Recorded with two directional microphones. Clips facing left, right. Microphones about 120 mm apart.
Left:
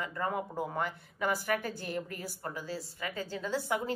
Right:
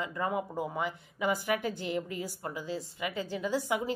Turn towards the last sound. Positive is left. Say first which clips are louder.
# right 2 dB
turn(degrees=-15)  # may be behind; listen again after turning